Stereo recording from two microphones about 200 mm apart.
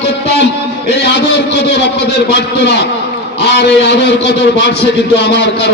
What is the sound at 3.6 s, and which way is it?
A man's voice, 60° left (ahead or behind).